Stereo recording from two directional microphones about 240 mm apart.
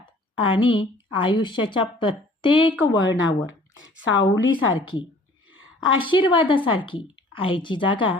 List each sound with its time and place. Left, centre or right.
0.3 s a woman's voice: left
4.0 s a woman's voice: left
5.5 s a sound: left
6.0 s a woman's voice: centre